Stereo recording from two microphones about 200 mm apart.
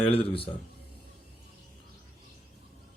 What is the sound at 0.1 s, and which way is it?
Speech, 25° left (ahead or behind).